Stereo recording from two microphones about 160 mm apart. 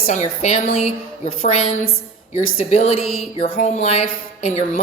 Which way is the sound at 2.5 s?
45° left (ahead or behind).